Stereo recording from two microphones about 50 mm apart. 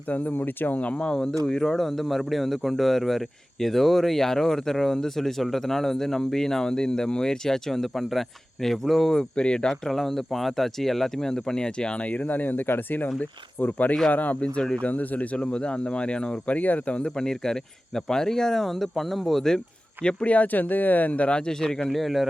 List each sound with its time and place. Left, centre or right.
0.1 s speech: left
0.8 s speech: left
14.6 s speech: centre
14.8 s speech: left
15.4 s speech: left
16.6 s speech: left
17.2 s speech: centre; by 21.3 s left
21.3 s speech: centre
21.9 s speech: centre